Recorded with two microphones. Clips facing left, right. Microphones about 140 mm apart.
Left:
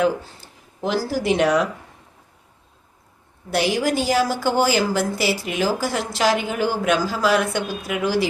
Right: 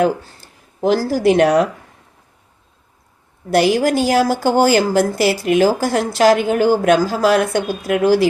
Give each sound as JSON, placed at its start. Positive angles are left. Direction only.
{"t": 0.8, "sound": "a woman's voice", "side_deg": -45}
{"t": 3.5, "sound": "a woman's voice", "side_deg": -50}